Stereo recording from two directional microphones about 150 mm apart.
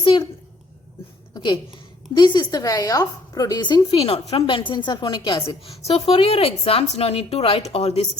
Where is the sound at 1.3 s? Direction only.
30° left (ahead or behind).